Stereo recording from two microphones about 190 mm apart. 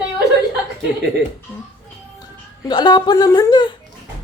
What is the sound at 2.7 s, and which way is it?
A woman's voice, 20° left (ahead or behind).